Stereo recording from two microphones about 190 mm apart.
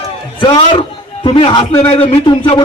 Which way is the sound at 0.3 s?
25° left (ahead or behind).